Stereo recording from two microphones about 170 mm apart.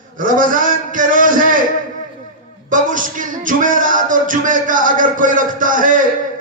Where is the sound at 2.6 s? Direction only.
50° right (ahead or behind).